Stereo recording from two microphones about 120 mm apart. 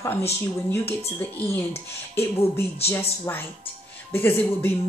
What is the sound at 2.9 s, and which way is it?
A woman's voice, 20° left (ahead or behind).